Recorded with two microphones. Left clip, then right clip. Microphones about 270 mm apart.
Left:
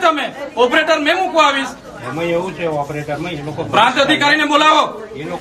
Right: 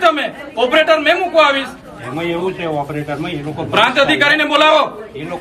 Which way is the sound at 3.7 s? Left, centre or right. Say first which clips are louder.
Even; centre.